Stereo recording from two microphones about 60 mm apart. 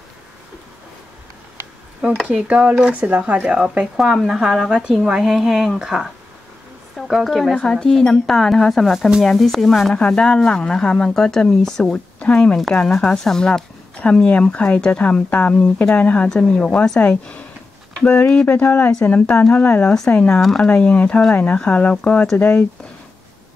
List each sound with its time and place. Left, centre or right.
2.3 s speech: right
7.2 s speech: centre
9.9 s speech: centre
15.9 s speech: left
16.3 s speech: centre
17.0 s speech: left
22.4 s speech: left